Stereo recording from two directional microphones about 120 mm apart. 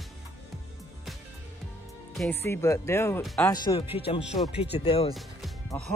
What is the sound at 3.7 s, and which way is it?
Speech, 50° left (ahead or behind).